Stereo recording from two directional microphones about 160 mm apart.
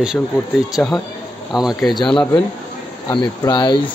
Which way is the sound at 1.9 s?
30° left (ahead or behind).